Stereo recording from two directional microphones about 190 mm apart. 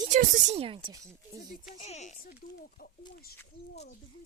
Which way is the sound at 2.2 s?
50° left (ahead or behind).